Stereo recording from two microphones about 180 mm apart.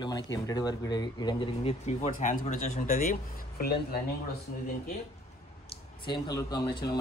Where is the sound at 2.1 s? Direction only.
50° left (ahead or behind).